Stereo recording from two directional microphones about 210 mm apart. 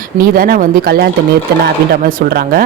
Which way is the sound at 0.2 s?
45° right (ahead or behind).